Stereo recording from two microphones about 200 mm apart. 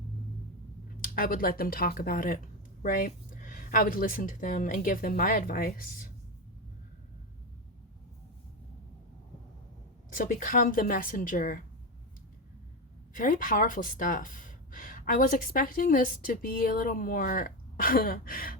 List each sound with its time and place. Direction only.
1.1 s speech: 45° left (ahead or behind)
10.2 s speech: 45° left (ahead or behind)
13.1 s speech: 45° left (ahead or behind)